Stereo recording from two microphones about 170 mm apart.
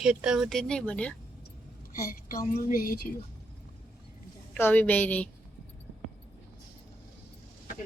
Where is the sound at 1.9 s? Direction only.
55° left (ahead or behind).